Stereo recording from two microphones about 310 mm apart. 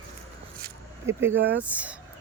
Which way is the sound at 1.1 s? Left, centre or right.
Centre.